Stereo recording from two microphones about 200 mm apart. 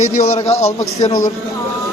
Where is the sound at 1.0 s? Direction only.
20° left (ahead or behind).